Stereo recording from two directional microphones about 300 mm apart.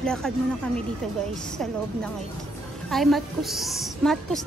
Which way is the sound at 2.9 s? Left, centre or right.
Centre.